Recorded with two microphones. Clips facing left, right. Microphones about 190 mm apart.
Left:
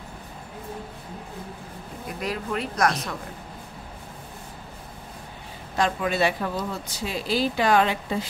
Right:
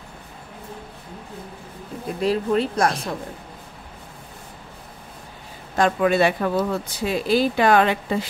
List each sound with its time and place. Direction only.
2.1 s speech: 30° right (ahead or behind)
5.8 s speech: 55° right (ahead or behind)